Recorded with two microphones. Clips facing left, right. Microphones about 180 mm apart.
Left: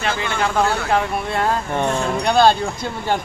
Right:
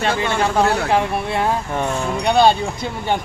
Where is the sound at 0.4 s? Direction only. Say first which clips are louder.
Right 1 dB; 20° right (ahead or behind).